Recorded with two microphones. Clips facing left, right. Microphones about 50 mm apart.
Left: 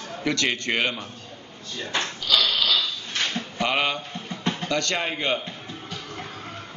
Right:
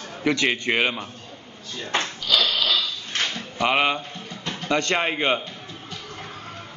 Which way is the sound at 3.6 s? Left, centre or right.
Centre.